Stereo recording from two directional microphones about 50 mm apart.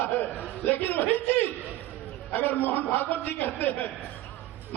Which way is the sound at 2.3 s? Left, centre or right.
Left.